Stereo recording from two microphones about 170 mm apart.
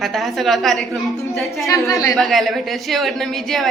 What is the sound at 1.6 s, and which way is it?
Speech, 20° left (ahead or behind).